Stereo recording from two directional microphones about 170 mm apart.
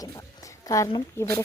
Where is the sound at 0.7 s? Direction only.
20° left (ahead or behind).